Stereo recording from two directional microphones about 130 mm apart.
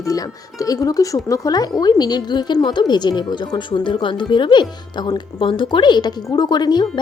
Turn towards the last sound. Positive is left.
turn(degrees=35)  # may be behind; listen again after turning